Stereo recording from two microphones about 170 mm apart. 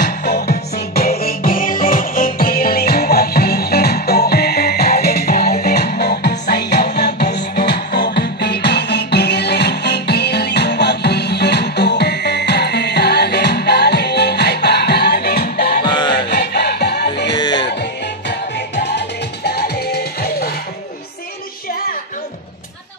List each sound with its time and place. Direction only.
0.2 s music: 70° left (ahead or behind)
15.8 s music: 25° left (ahead or behind)
16.3 s music: 75° left (ahead or behind)
17.4 s music: 25° left (ahead or behind)
18.8 s music: 80° left